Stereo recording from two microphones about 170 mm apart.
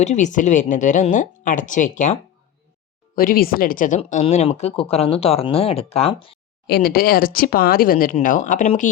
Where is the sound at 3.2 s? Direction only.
60° left (ahead or behind); by 6.4 s 30° left (ahead or behind).